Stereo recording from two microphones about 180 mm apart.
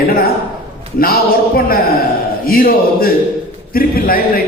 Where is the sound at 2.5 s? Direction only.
55° left (ahead or behind).